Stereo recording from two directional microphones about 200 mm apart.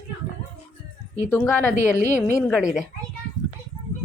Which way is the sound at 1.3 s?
10° left (ahead or behind).